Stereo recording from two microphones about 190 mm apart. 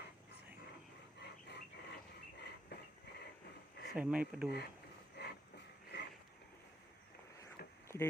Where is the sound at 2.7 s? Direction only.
60° left (ahead or behind).